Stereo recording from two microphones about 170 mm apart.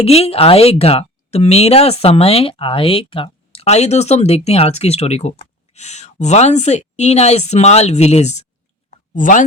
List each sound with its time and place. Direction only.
0.0 s speech: 35° left (ahead or behind)